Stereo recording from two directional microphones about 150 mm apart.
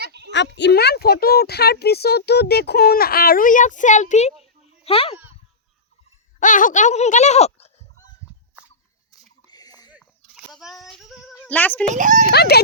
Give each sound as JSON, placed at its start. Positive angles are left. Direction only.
{"t": 0.7, "sound": "speech", "side_deg": 90}
{"t": 4.8, "sound": "speech", "side_deg": 40}
{"t": 6.4, "sound": "speech", "side_deg": 60}
{"t": 9.5, "sound": "a sound", "side_deg": 25}
{"t": 9.9, "sound": "child singing", "side_deg": -5}
{"t": 11.3, "sound": "speech", "side_deg": 10}
{"t": 11.9, "sound": "speech", "side_deg": -60}
{"t": 12.3, "sound": "speech", "side_deg": 90}